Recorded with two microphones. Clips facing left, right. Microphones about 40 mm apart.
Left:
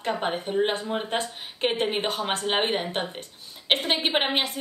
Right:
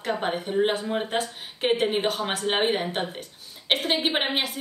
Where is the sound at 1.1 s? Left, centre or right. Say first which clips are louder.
Right 1 dB; centre.